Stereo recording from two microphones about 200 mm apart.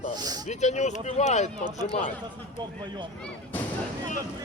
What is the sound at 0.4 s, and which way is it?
Speech, 35° left (ahead or behind).